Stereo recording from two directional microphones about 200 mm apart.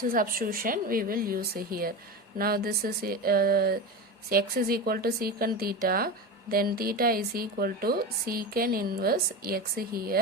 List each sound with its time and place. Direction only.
0.0 s a woman's voice: 45° right (ahead or behind)